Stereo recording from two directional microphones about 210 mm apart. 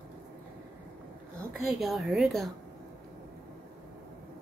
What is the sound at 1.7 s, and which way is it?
Speech, centre (ahead or behind).